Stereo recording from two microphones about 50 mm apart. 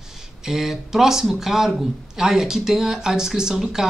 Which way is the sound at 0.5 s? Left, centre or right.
Centre.